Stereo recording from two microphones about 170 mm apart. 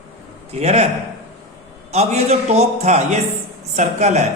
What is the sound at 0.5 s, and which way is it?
Speech, 35° right (ahead or behind).